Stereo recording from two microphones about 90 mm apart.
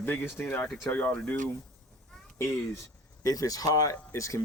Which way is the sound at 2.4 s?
25° left (ahead or behind).